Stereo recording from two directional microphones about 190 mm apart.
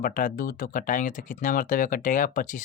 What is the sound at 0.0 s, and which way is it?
Speech, 45° left (ahead or behind).